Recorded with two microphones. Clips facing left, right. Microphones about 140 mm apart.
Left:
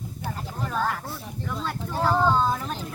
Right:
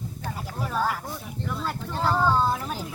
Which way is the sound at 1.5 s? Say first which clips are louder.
Even; 5° right (ahead or behind).